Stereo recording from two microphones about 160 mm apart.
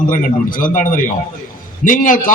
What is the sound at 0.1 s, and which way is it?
A man's voice, 60° left (ahead or behind).